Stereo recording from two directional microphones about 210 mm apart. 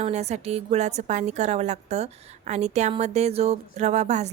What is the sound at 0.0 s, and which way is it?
A woman's voice, 30° right (ahead or behind).